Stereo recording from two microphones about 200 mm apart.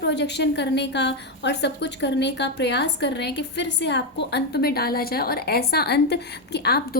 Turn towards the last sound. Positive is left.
turn(degrees=50)  # may be behind; listen again after turning